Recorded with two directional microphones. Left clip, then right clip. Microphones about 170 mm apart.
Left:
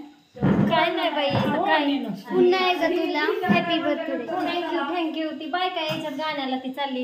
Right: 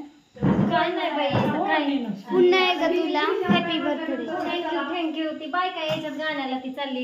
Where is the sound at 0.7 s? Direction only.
25° left (ahead or behind).